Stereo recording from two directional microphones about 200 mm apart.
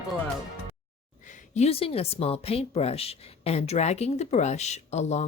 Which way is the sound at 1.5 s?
30° left (ahead or behind).